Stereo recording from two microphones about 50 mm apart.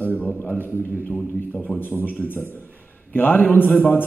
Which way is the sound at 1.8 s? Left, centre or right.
Left.